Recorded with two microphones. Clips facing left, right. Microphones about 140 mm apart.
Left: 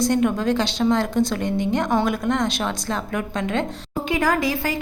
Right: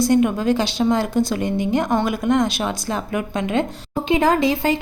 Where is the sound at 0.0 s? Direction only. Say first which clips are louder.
Right 3 dB; 5° right (ahead or behind).